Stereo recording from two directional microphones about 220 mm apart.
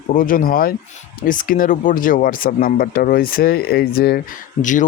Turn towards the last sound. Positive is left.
turn(degrees=35)  # may be behind; listen again after turning